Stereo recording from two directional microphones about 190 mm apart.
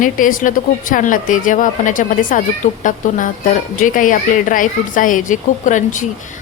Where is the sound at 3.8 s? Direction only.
45° left (ahead or behind).